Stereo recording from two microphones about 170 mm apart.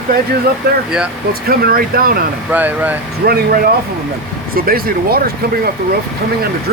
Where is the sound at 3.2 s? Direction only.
70° right (ahead or behind).